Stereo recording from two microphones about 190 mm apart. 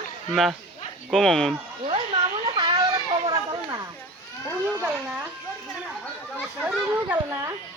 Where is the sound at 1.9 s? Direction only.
25° right (ahead or behind).